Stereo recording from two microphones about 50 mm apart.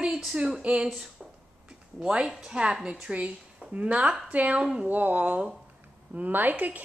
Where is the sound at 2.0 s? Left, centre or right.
Centre.